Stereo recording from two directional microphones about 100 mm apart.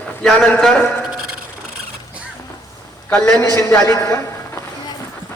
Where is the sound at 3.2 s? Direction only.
30° left (ahead or behind).